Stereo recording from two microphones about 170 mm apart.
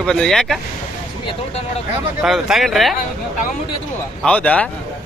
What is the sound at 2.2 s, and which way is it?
Speech, 5° right (ahead or behind).